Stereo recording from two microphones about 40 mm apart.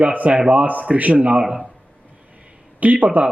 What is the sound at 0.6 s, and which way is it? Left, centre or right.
Speech, right.